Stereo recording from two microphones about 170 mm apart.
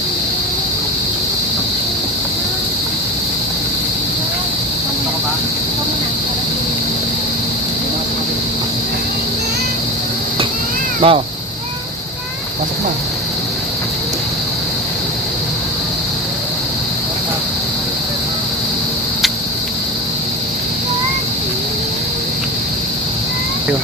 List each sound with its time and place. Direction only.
11.0 s speech: 35° right (ahead or behind)